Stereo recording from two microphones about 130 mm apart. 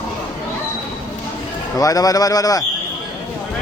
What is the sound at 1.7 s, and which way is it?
Speech, 30° left (ahead or behind).